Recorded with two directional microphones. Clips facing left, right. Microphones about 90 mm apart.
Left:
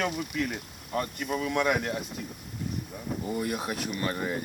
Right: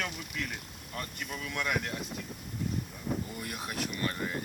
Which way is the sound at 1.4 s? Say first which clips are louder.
Left 6 dB; 30° left (ahead or behind).